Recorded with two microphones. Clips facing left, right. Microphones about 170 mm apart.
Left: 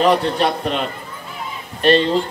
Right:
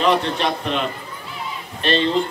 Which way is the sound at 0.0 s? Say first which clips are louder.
Left 3 dB; 40° left (ahead or behind).